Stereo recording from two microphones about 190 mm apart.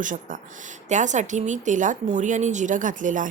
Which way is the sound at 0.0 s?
45° right (ahead or behind).